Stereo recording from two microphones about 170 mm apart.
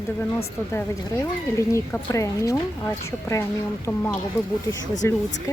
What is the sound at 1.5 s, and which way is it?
Speech, 20° left (ahead or behind).